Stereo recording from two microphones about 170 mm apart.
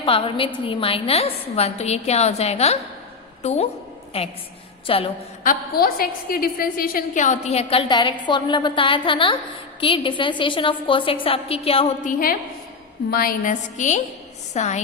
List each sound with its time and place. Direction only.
0.0 s a woman's voice: 30° left (ahead or behind)
5.8 s a woman's voice: 60° left (ahead or behind); by 11.9 s 35° left (ahead or behind)
12.0 s a woman's voice: 60° left (ahead or behind); by 14.8 s 40° left (ahead or behind)